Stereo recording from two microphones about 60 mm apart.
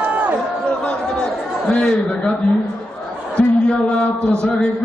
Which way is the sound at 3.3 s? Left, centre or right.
Left.